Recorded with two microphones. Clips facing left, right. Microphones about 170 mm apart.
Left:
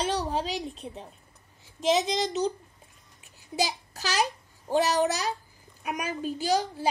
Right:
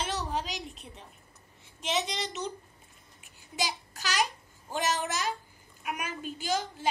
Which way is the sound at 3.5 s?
40° left (ahead or behind).